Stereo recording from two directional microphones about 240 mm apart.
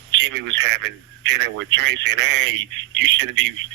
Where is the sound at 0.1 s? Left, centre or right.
Right.